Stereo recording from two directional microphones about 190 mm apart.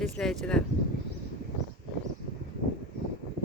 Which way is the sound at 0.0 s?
Centre (ahead or behind).